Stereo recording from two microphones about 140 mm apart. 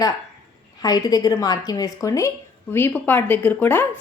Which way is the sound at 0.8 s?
25° left (ahead or behind).